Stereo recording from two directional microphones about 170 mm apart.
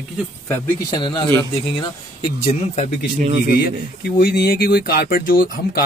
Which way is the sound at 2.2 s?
40° left (ahead or behind).